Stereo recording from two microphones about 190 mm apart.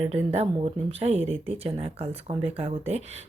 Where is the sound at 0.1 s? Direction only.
35° right (ahead or behind).